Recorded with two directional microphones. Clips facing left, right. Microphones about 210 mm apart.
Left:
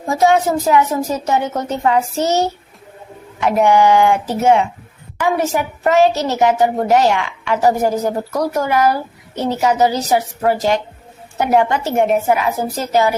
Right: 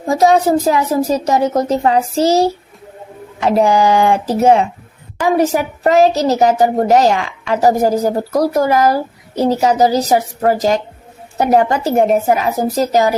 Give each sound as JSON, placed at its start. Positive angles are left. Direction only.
{"t": 0.1, "sound": "a woman's voice", "side_deg": -35}